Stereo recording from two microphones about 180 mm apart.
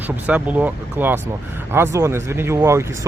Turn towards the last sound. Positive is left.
turn(degrees=-15)  # may be behind; listen again after turning